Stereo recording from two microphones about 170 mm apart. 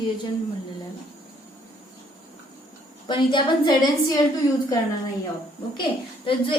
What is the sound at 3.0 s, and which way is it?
A woman's voice, 25° left (ahead or behind).